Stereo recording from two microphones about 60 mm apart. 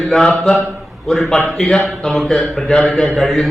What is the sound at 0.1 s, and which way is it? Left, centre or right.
Speech, centre.